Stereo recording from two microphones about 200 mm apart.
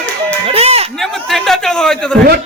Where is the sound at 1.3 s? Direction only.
Centre (ahead or behind).